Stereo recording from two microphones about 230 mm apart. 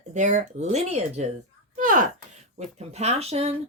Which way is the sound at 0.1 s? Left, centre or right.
Right.